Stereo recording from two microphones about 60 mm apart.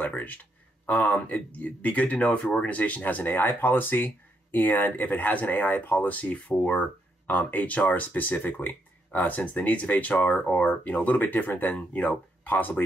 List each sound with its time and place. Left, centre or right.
0.0 s speech: left